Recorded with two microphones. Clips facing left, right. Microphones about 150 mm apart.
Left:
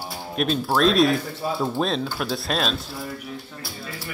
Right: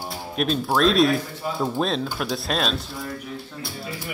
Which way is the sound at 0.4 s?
Centre (ahead or behind).